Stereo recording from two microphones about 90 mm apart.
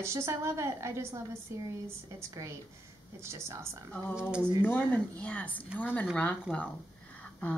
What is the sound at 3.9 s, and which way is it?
Speech, 20° left (ahead or behind).